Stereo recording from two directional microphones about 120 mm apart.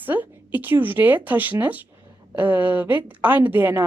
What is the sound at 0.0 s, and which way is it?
A woman's voice, 15° right (ahead or behind).